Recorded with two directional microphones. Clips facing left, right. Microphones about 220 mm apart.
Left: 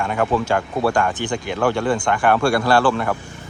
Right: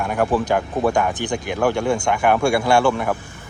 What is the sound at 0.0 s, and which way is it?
Speech, 5° right (ahead or behind).